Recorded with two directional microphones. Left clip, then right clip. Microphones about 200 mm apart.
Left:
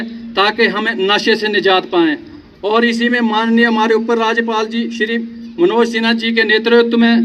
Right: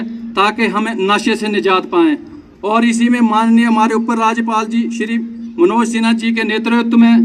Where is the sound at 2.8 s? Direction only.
70° right (ahead or behind).